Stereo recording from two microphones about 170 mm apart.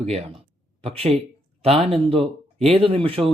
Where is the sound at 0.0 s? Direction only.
40° right (ahead or behind).